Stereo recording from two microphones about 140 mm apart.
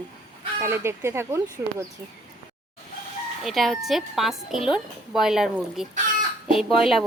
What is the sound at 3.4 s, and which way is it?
A woman's voice, centre (ahead or behind).